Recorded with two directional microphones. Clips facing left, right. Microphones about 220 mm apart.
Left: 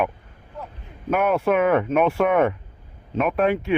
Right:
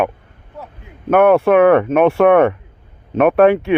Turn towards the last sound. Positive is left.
turn(degrees=-70)  # may be behind; listen again after turning